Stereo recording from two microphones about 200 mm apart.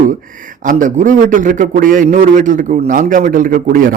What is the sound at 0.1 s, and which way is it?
Speech, 40° right (ahead or behind).